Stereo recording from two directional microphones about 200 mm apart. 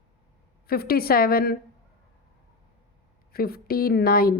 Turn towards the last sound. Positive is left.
turn(degrees=50)  # may be behind; listen again after turning